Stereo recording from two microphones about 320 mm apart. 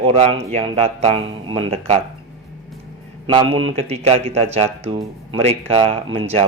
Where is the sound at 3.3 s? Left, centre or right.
Centre.